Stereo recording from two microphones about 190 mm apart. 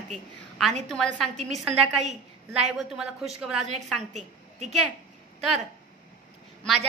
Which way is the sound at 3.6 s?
40° right (ahead or behind).